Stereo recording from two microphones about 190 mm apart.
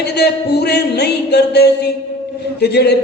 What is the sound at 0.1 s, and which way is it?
A man's voice, 60° left (ahead or behind).